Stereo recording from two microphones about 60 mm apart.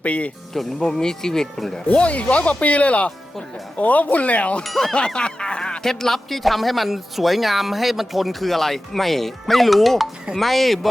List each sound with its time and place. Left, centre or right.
0.0 s speech: left
0.5 s speech: centre
1.9 s speech: left
4.6 s speech: centre